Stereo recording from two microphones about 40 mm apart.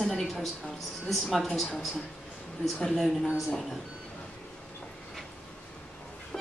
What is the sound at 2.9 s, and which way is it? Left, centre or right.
Speech, centre.